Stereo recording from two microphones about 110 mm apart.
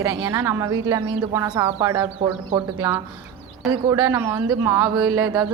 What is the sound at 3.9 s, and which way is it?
Speech, 30° right (ahead or behind).